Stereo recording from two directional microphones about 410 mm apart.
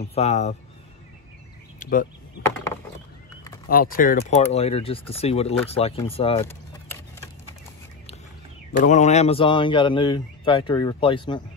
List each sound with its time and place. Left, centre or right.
0.0 s speech: centre
1.8 s a sound: centre
3.6 s speech: left
8.7 s speech: centre